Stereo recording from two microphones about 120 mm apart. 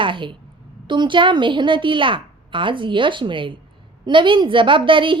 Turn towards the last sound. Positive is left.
turn(degrees=-45)  # may be behind; listen again after turning